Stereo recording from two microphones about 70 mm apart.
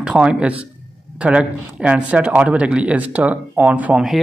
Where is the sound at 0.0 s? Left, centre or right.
Centre.